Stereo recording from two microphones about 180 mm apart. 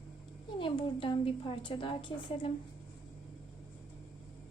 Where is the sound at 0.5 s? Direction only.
30° left (ahead or behind).